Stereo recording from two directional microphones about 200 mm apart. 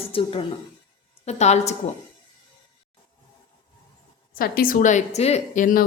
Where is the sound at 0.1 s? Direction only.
25° left (ahead or behind).